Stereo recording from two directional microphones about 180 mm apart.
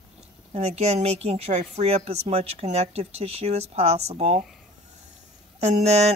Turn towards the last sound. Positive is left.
turn(degrees=-35)  # may be behind; listen again after turning